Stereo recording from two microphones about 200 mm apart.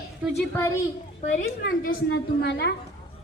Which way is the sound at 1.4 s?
50° left (ahead or behind).